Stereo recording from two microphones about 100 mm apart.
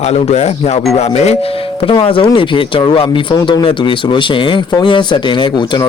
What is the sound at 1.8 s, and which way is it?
Speech, 65° left (ahead or behind).